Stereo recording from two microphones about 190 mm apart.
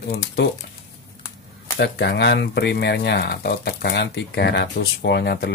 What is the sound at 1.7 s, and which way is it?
Speech, 60° left (ahead or behind).